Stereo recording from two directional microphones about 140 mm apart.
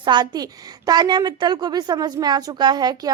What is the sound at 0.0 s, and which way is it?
A woman's voice, 30° right (ahead or behind).